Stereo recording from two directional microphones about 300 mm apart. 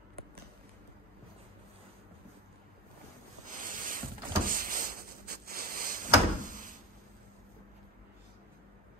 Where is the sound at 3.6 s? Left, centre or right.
Right.